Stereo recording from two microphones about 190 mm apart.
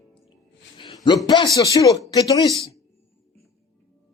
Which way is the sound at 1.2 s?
20° left (ahead or behind).